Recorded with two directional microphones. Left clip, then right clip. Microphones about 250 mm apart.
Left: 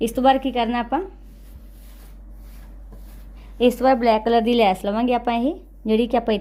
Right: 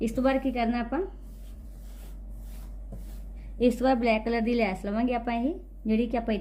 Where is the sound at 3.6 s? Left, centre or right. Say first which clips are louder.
Left 7 dB; centre.